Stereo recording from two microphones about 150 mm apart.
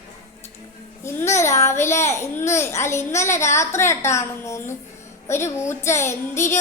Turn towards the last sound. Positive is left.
turn(degrees=20)  # may be behind; listen again after turning